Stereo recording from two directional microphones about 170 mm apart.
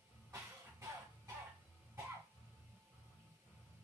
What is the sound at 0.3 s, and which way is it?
Music, 15° right (ahead or behind).